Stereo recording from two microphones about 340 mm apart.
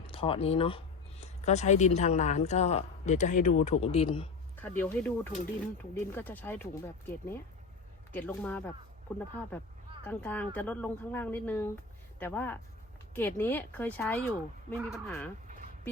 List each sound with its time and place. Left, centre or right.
0.1 s a woman's voice: centre